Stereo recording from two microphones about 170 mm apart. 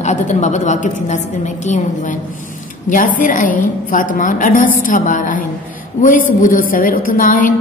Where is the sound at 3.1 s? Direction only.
50° left (ahead or behind).